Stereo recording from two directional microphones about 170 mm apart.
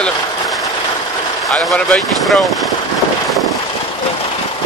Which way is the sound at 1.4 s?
Centre (ahead or behind).